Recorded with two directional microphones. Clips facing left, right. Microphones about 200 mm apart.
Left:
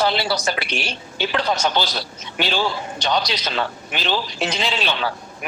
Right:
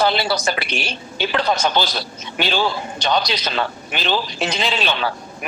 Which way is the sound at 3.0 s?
55° right (ahead or behind).